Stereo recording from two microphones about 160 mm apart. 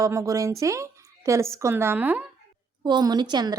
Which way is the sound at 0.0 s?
20° right (ahead or behind).